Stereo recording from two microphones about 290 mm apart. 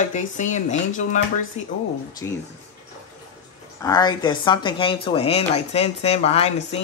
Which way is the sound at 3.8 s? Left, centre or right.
Centre.